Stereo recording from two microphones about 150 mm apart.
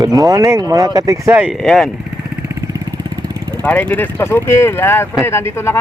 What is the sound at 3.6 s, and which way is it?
Speech, 10° left (ahead or behind).